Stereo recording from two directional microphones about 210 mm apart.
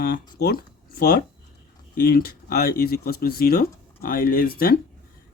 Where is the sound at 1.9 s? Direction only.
45° left (ahead or behind).